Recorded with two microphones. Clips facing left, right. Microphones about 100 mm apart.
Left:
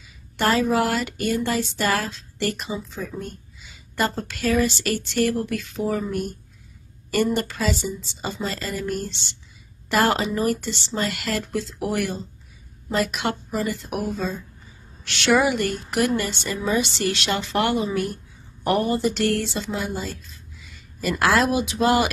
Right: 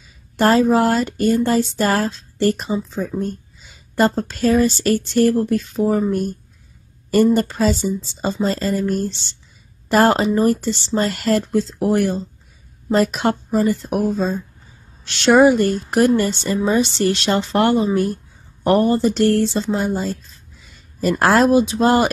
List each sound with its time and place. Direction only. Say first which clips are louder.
0.4 s speech: right 6 dB; 35° right (ahead or behind)